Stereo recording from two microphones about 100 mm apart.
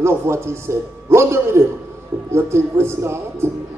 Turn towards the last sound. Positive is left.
turn(degrees=-25)  # may be behind; listen again after turning